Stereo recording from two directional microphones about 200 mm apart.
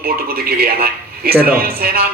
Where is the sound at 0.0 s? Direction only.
50° right (ahead or behind).